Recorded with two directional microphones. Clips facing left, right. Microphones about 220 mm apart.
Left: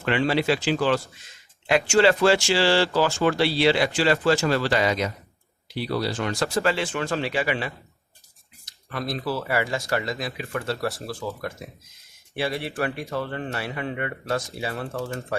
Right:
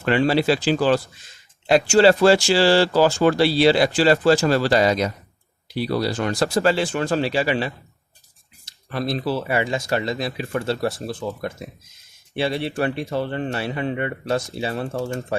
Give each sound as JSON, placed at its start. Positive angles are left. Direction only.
{"t": 0.0, "sound": "speech", "side_deg": -40}